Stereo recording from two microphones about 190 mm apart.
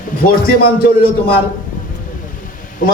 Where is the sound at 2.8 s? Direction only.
45° left (ahead or behind).